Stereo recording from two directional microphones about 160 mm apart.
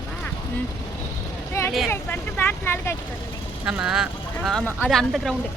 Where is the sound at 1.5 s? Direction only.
20° left (ahead or behind).